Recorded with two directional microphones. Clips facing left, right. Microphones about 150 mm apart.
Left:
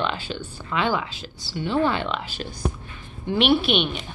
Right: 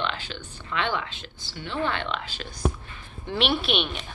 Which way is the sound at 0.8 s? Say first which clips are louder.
Left 5 dB; 40° left (ahead or behind).